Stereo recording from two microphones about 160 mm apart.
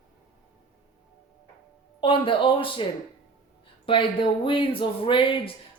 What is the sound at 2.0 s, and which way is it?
Speech, 30° left (ahead or behind).